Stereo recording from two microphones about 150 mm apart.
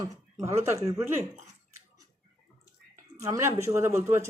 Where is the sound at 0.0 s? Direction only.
20° right (ahead or behind).